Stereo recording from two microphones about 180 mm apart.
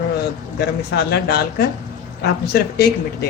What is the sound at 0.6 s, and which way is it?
Speech, 65° left (ahead or behind).